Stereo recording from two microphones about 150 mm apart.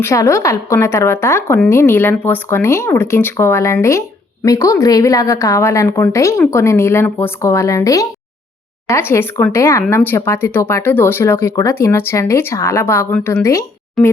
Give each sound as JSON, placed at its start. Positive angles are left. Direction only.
{"t": 0.0, "sound": "a woman's voice", "side_deg": 20}
{"t": 14.0, "sound": "speech", "side_deg": 0}